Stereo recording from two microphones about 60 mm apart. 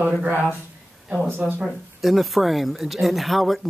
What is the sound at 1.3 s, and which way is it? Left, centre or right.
Speech, right.